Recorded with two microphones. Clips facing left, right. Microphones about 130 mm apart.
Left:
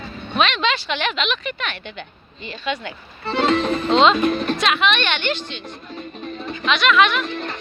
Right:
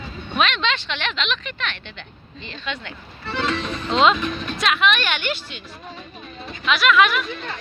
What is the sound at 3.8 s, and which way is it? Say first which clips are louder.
Speech: left 1 dB; 35° left (ahead or behind).